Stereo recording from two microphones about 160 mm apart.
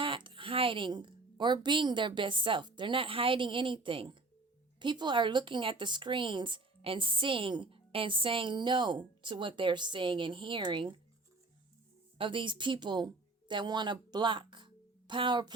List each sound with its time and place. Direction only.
0.0 s a woman's voice: 30° right (ahead or behind)
12.1 s speech: 35° right (ahead or behind)